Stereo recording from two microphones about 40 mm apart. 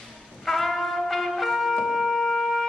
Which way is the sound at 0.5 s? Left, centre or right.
Centre.